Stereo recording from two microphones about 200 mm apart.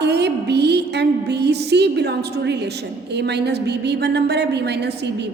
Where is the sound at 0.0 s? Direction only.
55° right (ahead or behind).